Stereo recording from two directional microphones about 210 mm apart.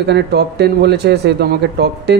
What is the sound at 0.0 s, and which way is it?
Speech, 50° right (ahead or behind).